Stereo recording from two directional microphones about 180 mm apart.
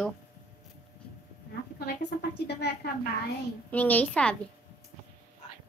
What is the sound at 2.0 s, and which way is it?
A woman's voice, 70° left (ahead or behind).